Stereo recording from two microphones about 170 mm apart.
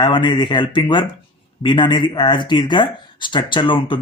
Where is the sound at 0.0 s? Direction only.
30° left (ahead or behind).